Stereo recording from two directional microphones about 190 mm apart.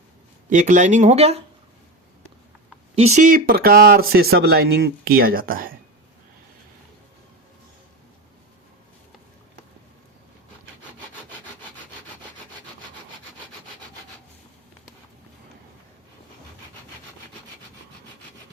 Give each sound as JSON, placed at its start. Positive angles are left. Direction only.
{"t": 0.5, "sound": "speech", "side_deg": -40}
{"t": 2.9, "sound": "speech", "side_deg": -35}